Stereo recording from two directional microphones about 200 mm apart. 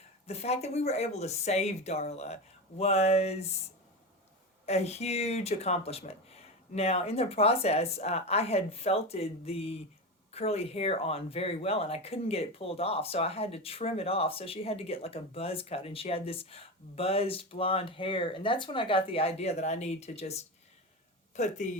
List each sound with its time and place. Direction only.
0.3 s speech: 30° left (ahead or behind)
4.6 s speech: 30° left (ahead or behind)